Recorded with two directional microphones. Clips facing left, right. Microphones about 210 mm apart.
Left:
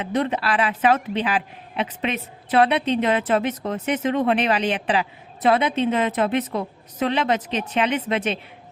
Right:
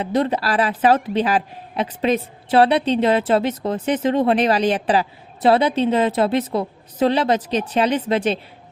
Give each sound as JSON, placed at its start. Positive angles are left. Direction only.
{"t": 0.0, "sound": "a woman's voice", "side_deg": -35}